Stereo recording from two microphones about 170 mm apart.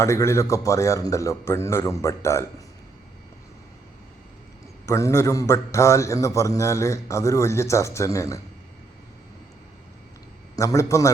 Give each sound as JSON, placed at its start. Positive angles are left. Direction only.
{"t": 0.0, "sound": "a man's voice", "side_deg": 15}
{"t": 4.9, "sound": "a man's voice", "side_deg": 15}
{"t": 10.5, "sound": "a man's voice", "side_deg": 20}